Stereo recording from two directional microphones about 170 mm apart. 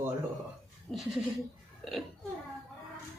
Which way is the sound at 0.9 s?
5° left (ahead or behind).